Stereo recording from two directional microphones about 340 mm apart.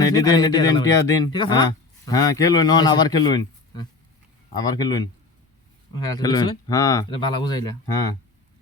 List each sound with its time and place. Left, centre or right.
0.0 s speech: centre
6.1 s speech: centre